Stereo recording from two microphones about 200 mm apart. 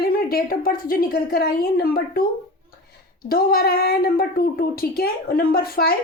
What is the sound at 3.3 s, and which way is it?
Speech, 50° left (ahead or behind).